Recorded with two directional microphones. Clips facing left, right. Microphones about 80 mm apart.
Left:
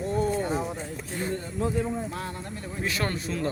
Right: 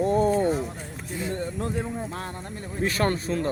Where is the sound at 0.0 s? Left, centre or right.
Right.